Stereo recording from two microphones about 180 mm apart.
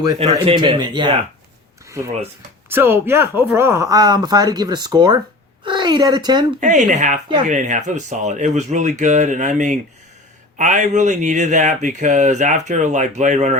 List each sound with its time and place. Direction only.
0.2 s speech: 35° right (ahead or behind)
2.6 s a woman's voice: 10° right (ahead or behind)
6.6 s speech: 45° right (ahead or behind)